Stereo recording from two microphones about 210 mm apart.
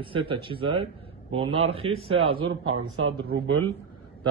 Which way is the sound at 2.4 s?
85° right.